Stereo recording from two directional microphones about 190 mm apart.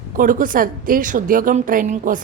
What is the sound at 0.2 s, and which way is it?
A woman's voice, 45° right (ahead or behind).